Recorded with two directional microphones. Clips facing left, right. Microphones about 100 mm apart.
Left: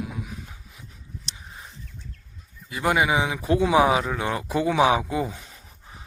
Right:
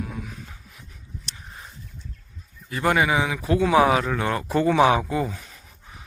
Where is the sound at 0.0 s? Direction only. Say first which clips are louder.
Even; 10° left (ahead or behind).